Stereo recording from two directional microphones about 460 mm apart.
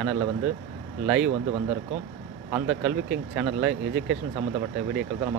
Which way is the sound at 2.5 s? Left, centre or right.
Centre.